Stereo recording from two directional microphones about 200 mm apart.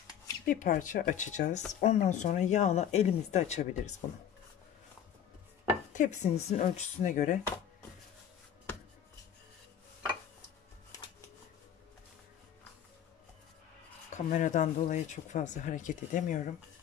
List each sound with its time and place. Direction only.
0.5 s speech: 40° left (ahead or behind)
5.9 s speech: 35° left (ahead or behind)
10.9 s music: 15° left (ahead or behind)
14.1 s speech: 40° left (ahead or behind)